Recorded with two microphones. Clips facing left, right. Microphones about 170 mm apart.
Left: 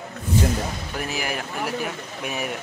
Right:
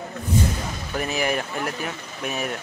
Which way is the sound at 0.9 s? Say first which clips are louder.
Right 6 dB; 5° left (ahead or behind).